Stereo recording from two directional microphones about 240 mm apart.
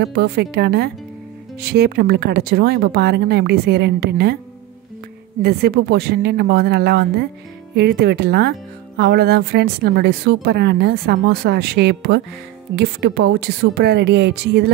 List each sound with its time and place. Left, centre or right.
0.0 s a woman's voice: right
5.4 s a woman's voice: right